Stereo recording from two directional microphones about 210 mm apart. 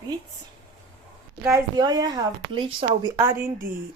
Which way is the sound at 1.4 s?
15° right (ahead or behind).